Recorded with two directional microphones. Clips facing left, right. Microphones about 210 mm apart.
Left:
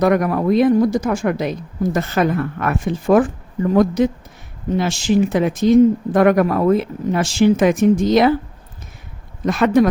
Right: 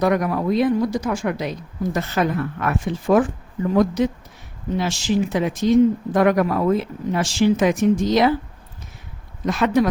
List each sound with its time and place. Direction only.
0.0 s speech: 55° left (ahead or behind)
9.5 s speech: 55° left (ahead or behind)